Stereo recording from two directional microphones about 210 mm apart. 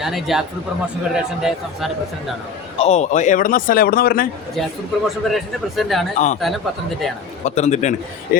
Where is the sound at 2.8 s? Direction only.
30° left (ahead or behind).